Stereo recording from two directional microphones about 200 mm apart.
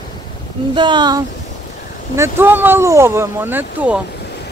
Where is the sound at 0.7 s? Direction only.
25° right (ahead or behind).